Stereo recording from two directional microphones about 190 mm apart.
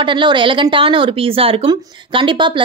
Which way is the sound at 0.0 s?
25° right (ahead or behind).